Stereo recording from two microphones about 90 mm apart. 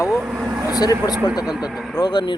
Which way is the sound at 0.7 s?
45° left (ahead or behind).